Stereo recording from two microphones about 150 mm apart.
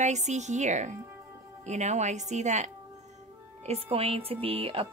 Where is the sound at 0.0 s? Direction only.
50° right (ahead or behind).